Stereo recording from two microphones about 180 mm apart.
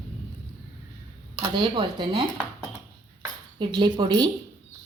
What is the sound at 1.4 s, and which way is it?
Speech, 25° right (ahead or behind).